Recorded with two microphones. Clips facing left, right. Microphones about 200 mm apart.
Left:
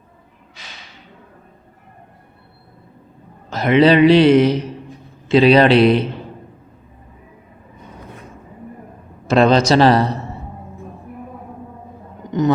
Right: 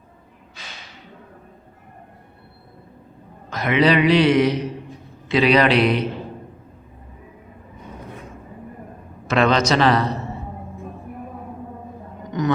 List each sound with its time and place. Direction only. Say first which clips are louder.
3.5 s a man's voice: left 5 dB; 30° left (ahead or behind)
9.2 s a man's voice: left 5 dB; 30° left (ahead or behind)
12.3 s a man's voice: left 5 dB; 25° left (ahead or behind)